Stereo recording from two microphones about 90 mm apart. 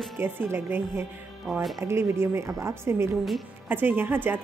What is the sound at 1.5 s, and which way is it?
Speech, centre (ahead or behind).